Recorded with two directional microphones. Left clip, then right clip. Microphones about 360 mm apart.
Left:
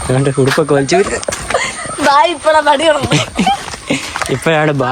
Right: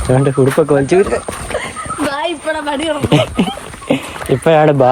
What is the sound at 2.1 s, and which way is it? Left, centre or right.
Speech, centre.